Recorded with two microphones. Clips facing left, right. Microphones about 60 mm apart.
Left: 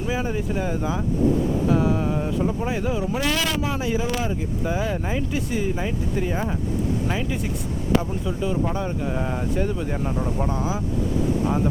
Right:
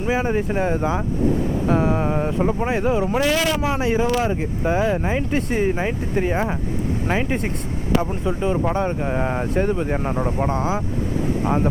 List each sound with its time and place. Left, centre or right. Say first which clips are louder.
0.0 s speech: right 5 dB; right
3.8 s speech: right 5 dB; right